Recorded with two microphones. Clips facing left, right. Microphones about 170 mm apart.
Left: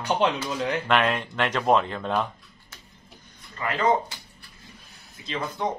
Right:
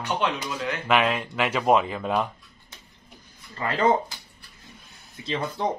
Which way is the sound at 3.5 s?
30° right (ahead or behind).